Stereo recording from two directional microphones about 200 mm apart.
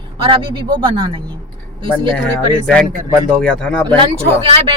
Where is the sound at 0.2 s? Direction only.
25° right (ahead or behind).